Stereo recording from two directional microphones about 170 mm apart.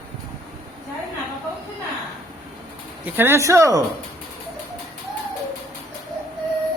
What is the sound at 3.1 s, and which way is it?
Speech, 15° right (ahead or behind).